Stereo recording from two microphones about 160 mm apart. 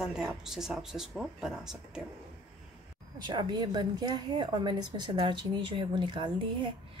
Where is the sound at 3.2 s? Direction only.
30° right (ahead or behind).